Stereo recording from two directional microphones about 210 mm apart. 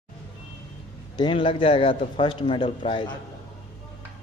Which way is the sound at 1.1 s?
25° left (ahead or behind).